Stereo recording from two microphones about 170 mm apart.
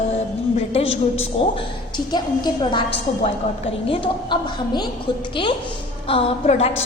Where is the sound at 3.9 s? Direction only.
30° left (ahead or behind).